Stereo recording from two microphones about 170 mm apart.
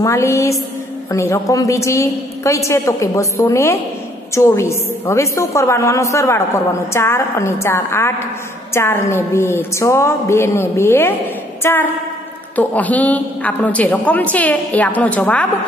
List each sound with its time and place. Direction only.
0.0 s a woman's voice: 15° left (ahead or behind)